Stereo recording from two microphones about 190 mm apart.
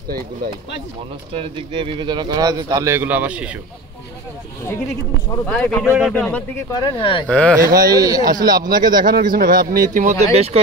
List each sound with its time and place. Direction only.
1.3 s speech: 30° right (ahead or behind); by 3.4 s 10° right (ahead or behind)
5.5 s speech: 5° left (ahead or behind)
5.9 s speech: 5° right (ahead or behind)
6.1 s speech: 10° left (ahead or behind)
6.7 s speech: 25° left (ahead or behind)
7.2 s speech: 5° left (ahead or behind)
7.5 s speech: 20° right (ahead or behind)
9.0 s a man's voice: 45° right (ahead or behind)